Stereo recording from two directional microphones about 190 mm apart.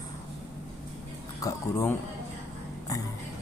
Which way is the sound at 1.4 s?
15° left (ahead or behind).